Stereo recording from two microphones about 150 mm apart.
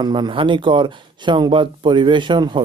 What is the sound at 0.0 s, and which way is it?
Speech, 30° right (ahead or behind).